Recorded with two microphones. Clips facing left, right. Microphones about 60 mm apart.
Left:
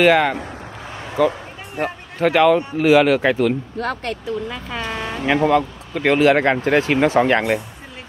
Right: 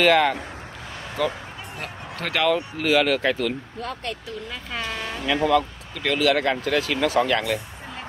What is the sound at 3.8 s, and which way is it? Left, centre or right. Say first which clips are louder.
Speech: left 6 dB; left.